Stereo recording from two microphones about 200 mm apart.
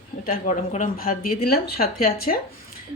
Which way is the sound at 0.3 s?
40° left (ahead or behind).